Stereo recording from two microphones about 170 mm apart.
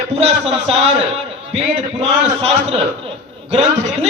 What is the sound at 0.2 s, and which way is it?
Speech, 35° right (ahead or behind).